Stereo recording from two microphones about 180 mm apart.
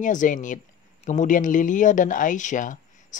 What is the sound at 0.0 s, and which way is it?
Speech, 45° left (ahead or behind).